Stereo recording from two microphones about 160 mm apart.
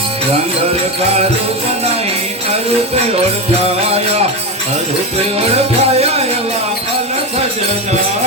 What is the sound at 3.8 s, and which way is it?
Music, 40° right (ahead or behind).